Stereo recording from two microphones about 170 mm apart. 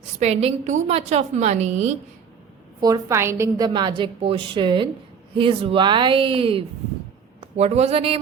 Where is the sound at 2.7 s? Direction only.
20° right (ahead or behind).